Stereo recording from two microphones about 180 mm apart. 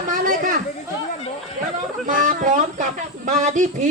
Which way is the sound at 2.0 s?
45° right (ahead or behind).